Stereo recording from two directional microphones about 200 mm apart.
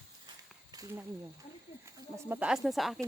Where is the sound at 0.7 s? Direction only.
20° right (ahead or behind).